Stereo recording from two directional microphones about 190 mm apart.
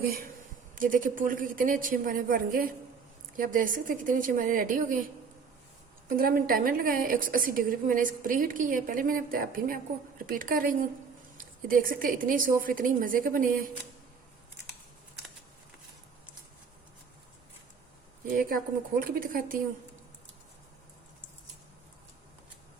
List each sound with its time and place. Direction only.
0.8 s a woman's voice: 45° right (ahead or behind)
6.1 s a woman's voice: 50° right (ahead or behind)
18.3 s a woman's voice: 45° right (ahead or behind)